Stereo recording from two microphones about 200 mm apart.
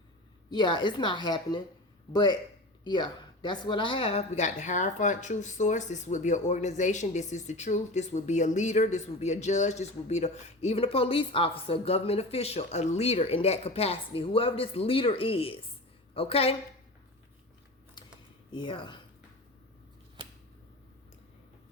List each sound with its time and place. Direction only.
0.5 s a woman's voice: 25° left (ahead or behind)
18.5 s a woman's voice: 25° left (ahead or behind)